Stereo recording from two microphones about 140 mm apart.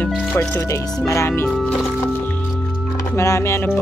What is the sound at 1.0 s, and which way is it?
Speech, 20° left (ahead or behind).